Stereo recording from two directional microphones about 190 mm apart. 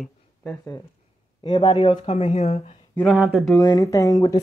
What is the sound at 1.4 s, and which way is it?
Speech, 25° left (ahead or behind).